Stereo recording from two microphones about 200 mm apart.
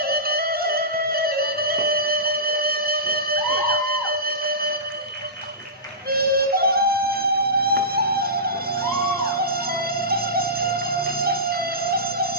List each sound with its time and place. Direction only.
0.0 s music: 50° right (ahead or behind)
6.1 s music: 50° right (ahead or behind)